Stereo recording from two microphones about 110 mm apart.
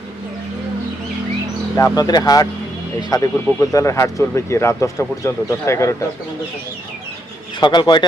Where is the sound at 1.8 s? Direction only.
35° left (ahead or behind).